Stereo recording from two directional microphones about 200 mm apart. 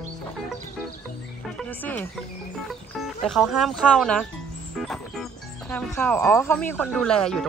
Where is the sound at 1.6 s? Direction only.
5° left (ahead or behind).